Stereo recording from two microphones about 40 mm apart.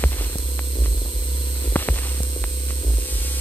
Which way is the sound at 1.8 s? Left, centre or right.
Left.